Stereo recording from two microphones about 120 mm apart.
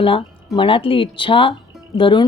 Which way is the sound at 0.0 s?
45° left (ahead or behind).